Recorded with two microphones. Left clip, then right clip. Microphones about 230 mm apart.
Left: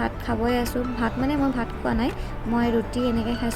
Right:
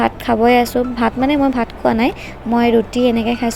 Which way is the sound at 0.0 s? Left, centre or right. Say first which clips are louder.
Right 12 dB; right.